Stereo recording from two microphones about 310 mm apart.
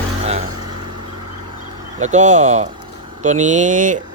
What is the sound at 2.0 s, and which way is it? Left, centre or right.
Speech, right.